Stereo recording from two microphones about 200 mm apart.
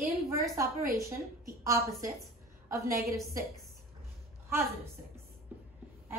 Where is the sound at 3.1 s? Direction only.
Centre (ahead or behind).